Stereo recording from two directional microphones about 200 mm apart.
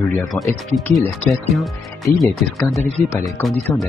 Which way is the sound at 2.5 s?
15° left (ahead or behind).